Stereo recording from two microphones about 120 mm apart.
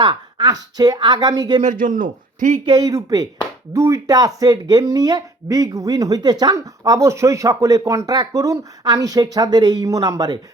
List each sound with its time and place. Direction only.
0.0 s speech: 40° right (ahead or behind)
2.6 s speech: 35° right (ahead or behind)